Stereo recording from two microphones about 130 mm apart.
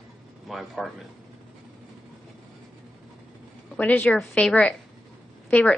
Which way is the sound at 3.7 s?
10° left (ahead or behind).